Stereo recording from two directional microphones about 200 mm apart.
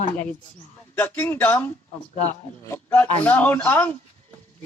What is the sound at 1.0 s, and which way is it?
Speech, 10° left (ahead or behind).